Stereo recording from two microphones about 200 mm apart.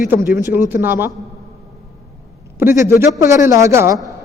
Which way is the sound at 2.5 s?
15° right (ahead or behind).